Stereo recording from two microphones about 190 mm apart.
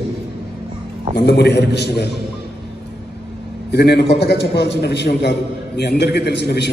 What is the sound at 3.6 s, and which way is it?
A man's voice, 60° left (ahead or behind).